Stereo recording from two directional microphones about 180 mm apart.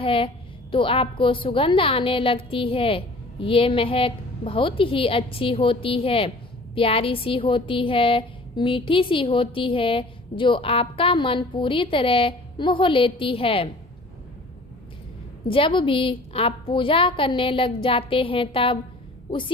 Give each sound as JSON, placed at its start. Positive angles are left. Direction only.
{"t": 0.0, "sound": "a woman's voice", "side_deg": 30}
{"t": 15.4, "sound": "a woman's voice", "side_deg": 30}